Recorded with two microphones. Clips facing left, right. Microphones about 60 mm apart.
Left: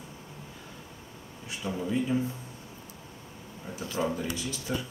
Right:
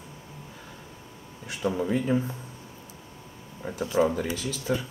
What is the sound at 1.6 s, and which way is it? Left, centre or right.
Speech, right.